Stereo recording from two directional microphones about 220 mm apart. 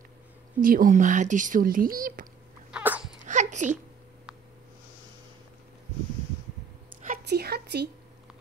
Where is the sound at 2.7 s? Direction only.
5° right (ahead or behind).